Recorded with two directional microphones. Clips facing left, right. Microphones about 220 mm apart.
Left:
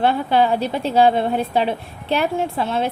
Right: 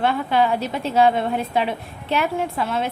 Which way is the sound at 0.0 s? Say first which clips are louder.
Left 2 dB; 30° left (ahead or behind).